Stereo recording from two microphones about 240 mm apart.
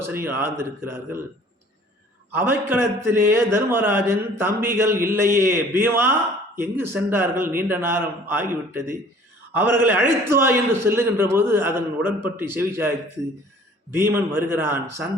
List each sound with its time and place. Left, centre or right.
0.0 s a man's voice: centre
2.3 s a man's voice: centre
13.9 s a man's voice: centre